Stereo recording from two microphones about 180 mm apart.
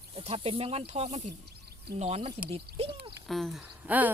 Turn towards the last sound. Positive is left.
turn(degrees=-10)  # may be behind; listen again after turning